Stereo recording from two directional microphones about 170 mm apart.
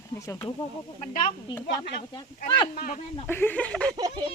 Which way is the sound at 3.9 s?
20° right (ahead or behind).